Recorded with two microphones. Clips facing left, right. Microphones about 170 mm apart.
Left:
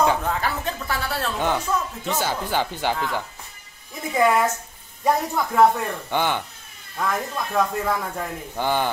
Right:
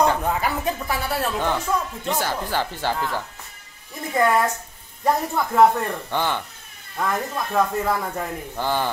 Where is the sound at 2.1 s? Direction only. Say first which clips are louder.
Left 1 dB; 20° left (ahead or behind).